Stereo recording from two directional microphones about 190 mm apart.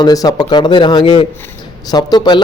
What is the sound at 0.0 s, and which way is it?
Speech, 20° left (ahead or behind).